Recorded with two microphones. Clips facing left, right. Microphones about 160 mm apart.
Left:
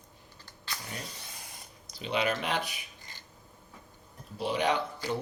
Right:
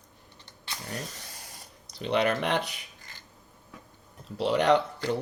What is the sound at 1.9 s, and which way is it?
Speech, 65° right (ahead or behind).